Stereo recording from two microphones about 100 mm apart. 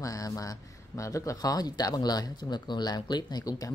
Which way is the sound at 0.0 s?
35° left (ahead or behind).